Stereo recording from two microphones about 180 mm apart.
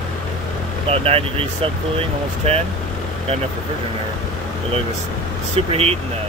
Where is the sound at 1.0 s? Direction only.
35° right (ahead or behind).